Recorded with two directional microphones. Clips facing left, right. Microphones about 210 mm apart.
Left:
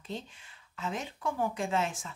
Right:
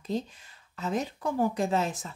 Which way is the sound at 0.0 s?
40° right (ahead or behind).